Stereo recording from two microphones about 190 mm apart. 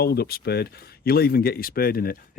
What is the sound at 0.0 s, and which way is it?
Speech, 55° left (ahead or behind).